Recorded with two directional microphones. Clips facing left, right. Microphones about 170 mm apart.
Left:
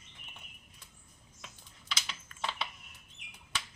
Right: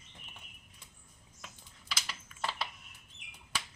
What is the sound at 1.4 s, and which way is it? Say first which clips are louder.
Typing: right 1 dB; 5° right (ahead or behind).